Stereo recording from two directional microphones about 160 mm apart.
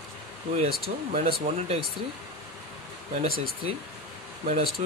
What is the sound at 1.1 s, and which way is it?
Speech, 40° right (ahead or behind).